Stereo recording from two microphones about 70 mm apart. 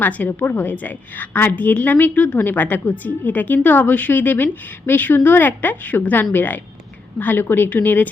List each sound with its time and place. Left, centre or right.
0.0 s a woman's voice: left